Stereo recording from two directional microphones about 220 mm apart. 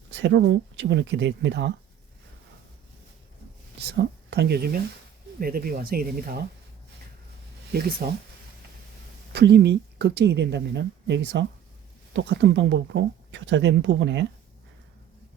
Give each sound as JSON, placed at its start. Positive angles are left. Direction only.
{"t": 0.1, "sound": "a woman's voice", "side_deg": -50}
{"t": 3.8, "sound": "a woman's voice", "side_deg": -50}
{"t": 7.7, "sound": "a woman's voice", "side_deg": -45}
{"t": 9.3, "sound": "a woman's voice", "side_deg": -50}